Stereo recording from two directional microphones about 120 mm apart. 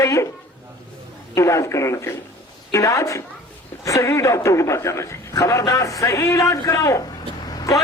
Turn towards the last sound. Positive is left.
turn(degrees=35)  # may be behind; listen again after turning